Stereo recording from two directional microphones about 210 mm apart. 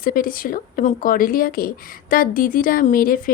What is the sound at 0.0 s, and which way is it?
Speech, 45° left (ahead or behind).